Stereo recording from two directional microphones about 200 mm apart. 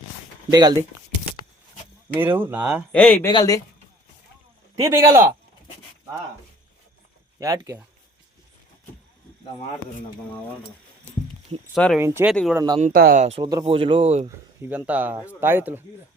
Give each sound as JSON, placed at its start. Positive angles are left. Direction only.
{"t": 0.5, "sound": "speech", "side_deg": -20}
{"t": 2.1, "sound": "speech", "side_deg": -10}
{"t": 2.9, "sound": "speech", "side_deg": 5}
{"t": 3.2, "sound": "speech", "side_deg": 20}
{"t": 4.8, "sound": "speech", "side_deg": -15}
{"t": 7.3, "sound": "speech", "side_deg": -15}
{"t": 11.7, "sound": "speech", "side_deg": 0}
{"t": 11.9, "sound": "speech", "side_deg": -10}
{"t": 12.5, "sound": "speech", "side_deg": -20}
{"t": 12.8, "sound": "speech", "side_deg": -45}
{"t": 13.2, "sound": "speech", "side_deg": -30}
{"t": 14.6, "sound": "speech", "side_deg": -10}